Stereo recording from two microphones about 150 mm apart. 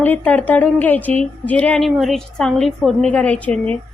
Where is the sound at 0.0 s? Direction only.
10° left (ahead or behind).